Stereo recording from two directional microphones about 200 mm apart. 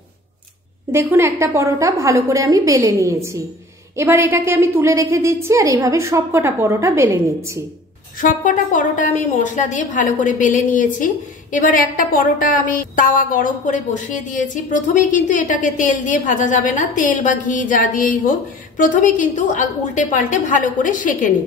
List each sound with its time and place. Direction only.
0.9 s a woman's voice: 15° right (ahead or behind)
8.2 s a woman's voice: 40° left (ahead or behind)